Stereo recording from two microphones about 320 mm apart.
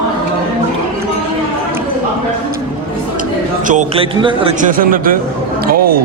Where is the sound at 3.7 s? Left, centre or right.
Centre.